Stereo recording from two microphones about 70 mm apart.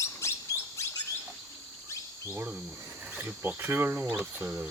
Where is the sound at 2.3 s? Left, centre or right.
Right.